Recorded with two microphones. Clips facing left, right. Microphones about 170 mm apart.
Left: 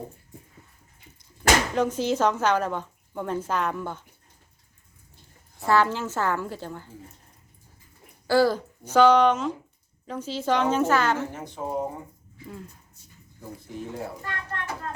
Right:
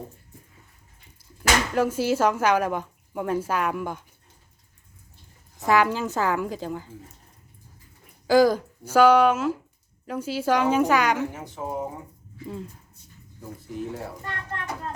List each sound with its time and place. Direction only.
1.7 s a woman's voice: 10° right (ahead or behind)
5.6 s a woman's voice: 15° right (ahead or behind)
8.3 s a woman's voice: 15° right (ahead or behind)
11.3 s speech: 5° right (ahead or behind)
13.4 s speech: centre (ahead or behind)
14.2 s a child's voice: 20° right (ahead or behind)